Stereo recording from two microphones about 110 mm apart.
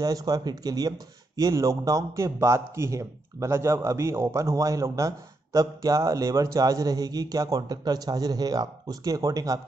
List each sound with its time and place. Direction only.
0.0 s a man's voice: 35° right (ahead or behind)